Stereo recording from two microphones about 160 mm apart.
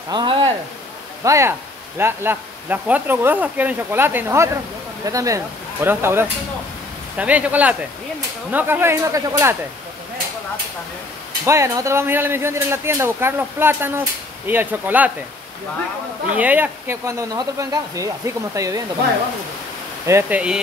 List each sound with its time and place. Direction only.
0.1 s speech: 30° right (ahead or behind)
1.2 s speech: 20° right (ahead or behind)
11.4 s speech: 20° right (ahead or behind)
16.3 s speech: 10° right (ahead or behind)
20.1 s speech: 15° right (ahead or behind)